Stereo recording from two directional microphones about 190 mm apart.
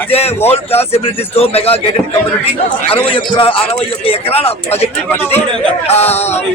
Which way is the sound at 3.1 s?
25° left (ahead or behind).